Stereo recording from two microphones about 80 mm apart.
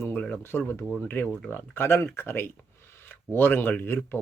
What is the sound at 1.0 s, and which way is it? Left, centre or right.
Speech, left.